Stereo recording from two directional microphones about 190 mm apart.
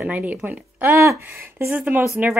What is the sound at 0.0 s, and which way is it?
Speech, 10° right (ahead or behind).